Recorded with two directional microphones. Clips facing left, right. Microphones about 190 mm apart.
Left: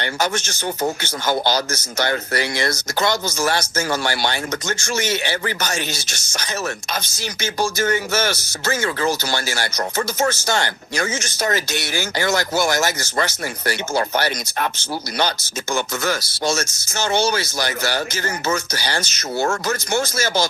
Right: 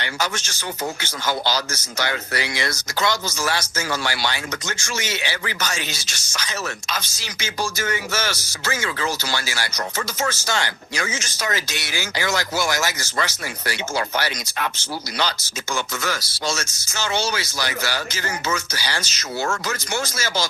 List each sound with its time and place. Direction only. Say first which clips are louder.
0.0 s speech: left 4 dB; 50° left (ahead or behind)
7.8 s speech: left 5 dB; 45° left (ahead or behind)
15.7 s speech: left 4 dB; 45° left (ahead or behind)